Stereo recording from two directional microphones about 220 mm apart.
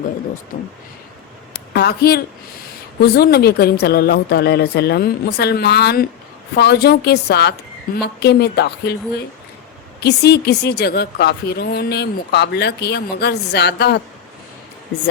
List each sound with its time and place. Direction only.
0.5 s speech: 35° left (ahead or behind)
1.5 s a woman's voice: 50° left (ahead or behind)
10.0 s a woman's voice: 45° left (ahead or behind)